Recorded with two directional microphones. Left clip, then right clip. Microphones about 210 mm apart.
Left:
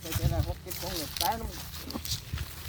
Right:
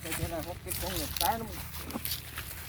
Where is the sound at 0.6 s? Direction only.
Centre (ahead or behind).